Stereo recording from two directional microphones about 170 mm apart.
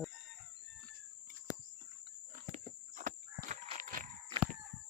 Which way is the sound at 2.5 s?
50° right (ahead or behind).